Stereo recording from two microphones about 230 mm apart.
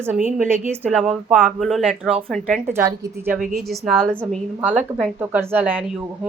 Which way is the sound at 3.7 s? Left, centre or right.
Centre.